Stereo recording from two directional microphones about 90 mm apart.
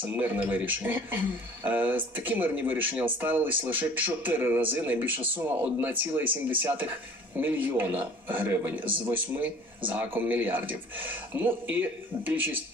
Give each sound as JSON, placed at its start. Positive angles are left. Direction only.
{"t": 0.0, "sound": "speech", "side_deg": -20}